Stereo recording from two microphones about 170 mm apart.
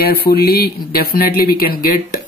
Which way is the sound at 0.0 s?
65° left (ahead or behind).